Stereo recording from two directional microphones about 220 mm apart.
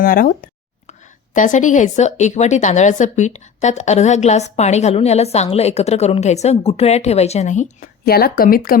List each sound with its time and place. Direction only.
0.0 s speech: 40° left (ahead or behind)